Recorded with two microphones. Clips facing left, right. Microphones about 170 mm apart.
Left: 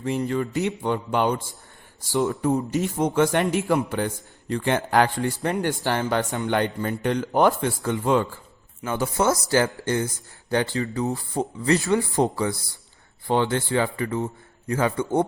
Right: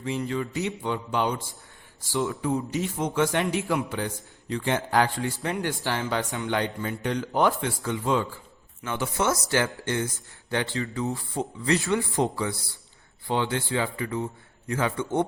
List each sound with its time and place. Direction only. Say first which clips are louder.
0.0 s a man's voice: left 4 dB; 50° left (ahead or behind)
2.1 s a man's voice: left 4 dB; 40° left (ahead or behind)
8.8 s a man's voice: left 4 dB; 40° left (ahead or behind)